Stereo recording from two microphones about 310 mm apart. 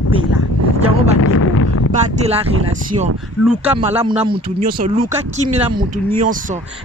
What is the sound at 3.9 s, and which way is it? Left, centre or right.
Speech, centre.